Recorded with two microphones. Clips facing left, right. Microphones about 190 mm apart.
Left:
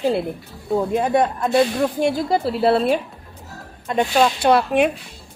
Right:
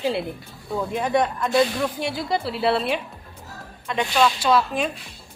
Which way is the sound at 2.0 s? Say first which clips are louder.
Left 6 dB; 45° left (ahead or behind).